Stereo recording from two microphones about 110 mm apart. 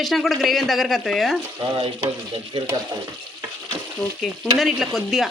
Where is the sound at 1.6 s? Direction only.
55° right (ahead or behind).